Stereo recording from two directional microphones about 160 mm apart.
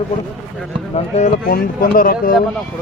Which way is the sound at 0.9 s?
45° left (ahead or behind).